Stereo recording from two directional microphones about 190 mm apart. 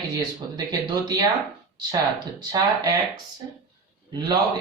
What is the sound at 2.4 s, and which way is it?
Speech, 20° right (ahead or behind).